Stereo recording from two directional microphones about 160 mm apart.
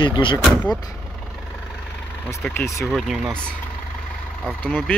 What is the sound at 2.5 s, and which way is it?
Speech, 15° left (ahead or behind).